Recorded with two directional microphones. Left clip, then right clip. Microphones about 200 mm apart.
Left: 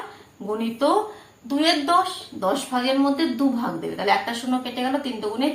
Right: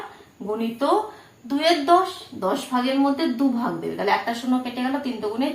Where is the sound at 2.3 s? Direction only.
10° right (ahead or behind).